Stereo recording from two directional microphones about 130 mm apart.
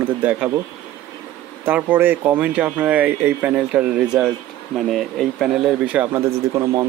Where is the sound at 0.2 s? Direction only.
10° right (ahead or behind).